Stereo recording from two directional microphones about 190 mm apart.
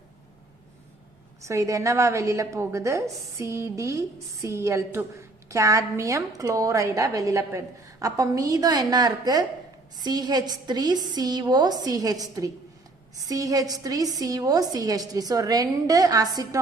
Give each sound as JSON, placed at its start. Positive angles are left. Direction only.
{"t": 1.4, "sound": "a woman's voice", "side_deg": -15}